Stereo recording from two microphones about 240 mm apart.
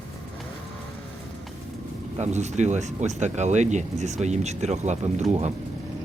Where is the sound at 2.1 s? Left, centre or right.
Right.